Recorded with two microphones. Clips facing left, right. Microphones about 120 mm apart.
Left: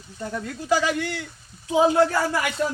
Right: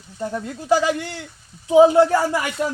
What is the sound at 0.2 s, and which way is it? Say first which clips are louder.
A man's voice: right 4 dB; 20° right (ahead or behind).